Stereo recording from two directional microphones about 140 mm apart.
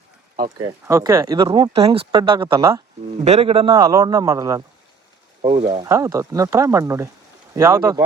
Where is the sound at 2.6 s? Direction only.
20° right (ahead or behind).